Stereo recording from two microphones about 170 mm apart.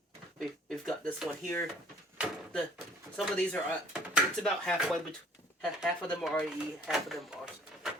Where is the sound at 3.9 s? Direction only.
Centre (ahead or behind).